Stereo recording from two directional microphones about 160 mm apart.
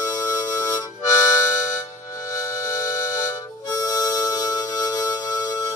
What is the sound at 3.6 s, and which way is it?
Harmonica, 20° left (ahead or behind).